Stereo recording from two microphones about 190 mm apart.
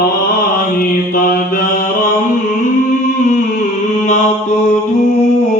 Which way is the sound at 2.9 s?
40° left (ahead or behind).